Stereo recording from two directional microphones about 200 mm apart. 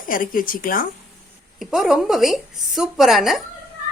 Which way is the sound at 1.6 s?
Centre (ahead or behind).